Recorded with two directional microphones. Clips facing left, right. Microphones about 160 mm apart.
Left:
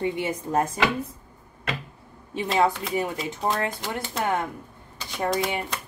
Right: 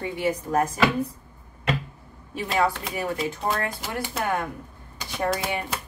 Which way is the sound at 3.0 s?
20° left (ahead or behind).